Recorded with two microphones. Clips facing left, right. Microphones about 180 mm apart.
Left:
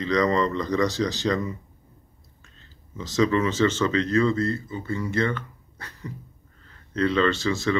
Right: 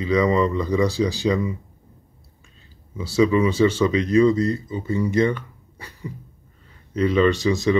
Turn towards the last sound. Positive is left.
turn(degrees=-15)  # may be behind; listen again after turning